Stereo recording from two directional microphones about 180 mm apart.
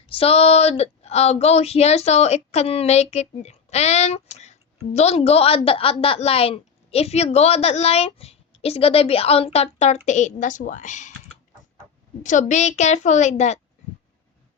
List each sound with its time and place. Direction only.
0.1 s a woman's voice: 35° left (ahead or behind)
12.2 s a woman's voice: 45° left (ahead or behind)